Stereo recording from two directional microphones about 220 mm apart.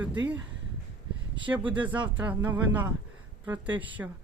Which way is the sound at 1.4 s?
5° right (ahead or behind).